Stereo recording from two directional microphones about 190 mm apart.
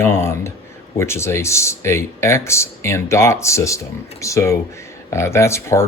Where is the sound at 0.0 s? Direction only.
15° left (ahead or behind).